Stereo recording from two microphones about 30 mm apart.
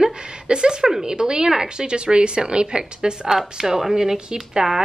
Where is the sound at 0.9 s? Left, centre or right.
Centre.